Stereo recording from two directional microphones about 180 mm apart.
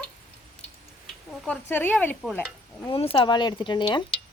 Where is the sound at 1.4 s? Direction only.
10° left (ahead or behind).